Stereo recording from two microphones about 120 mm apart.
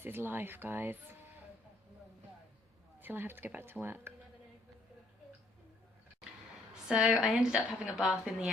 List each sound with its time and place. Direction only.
0.0 s speech: 15° right (ahead or behind)
3.0 s speech: 15° right (ahead or behind)
6.8 s a woman's voice: 5° right (ahead or behind)